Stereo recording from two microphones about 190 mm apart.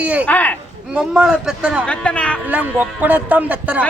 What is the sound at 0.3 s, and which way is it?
Speech, 10° left (ahead or behind).